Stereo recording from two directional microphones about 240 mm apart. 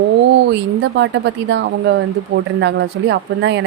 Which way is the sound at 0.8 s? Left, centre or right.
Right.